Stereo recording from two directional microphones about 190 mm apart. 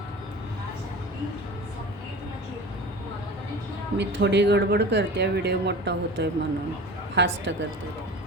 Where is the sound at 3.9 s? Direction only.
65° right (ahead or behind).